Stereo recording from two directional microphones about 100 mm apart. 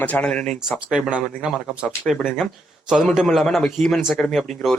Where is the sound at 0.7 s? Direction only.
5° right (ahead or behind).